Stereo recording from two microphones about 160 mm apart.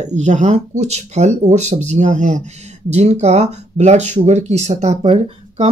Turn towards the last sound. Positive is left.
turn(degrees=-45)  # may be behind; listen again after turning